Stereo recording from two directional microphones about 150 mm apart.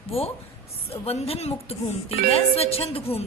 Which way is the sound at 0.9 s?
45° left (ahead or behind).